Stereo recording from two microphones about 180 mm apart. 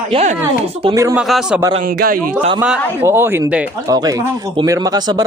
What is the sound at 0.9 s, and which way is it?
Speech, 15° right (ahead or behind).